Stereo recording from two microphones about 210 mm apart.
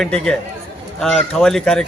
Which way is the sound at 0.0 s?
5° left (ahead or behind).